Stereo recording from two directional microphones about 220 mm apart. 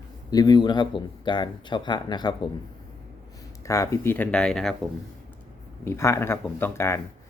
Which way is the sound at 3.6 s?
15° left (ahead or behind).